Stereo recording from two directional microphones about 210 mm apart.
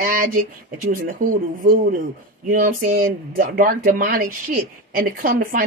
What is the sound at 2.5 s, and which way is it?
Speech, 40° right (ahead or behind).